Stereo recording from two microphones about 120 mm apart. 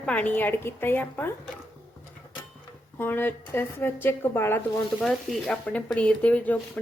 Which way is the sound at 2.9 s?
15° left (ahead or behind).